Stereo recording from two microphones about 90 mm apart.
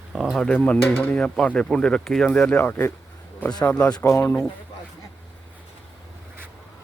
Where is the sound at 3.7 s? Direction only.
15° left (ahead or behind).